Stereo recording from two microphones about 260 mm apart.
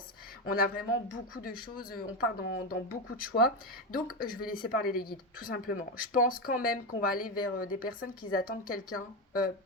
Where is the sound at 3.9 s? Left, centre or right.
Left.